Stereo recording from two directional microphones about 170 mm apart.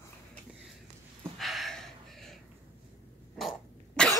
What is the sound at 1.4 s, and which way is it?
Gasp, centre (ahead or behind).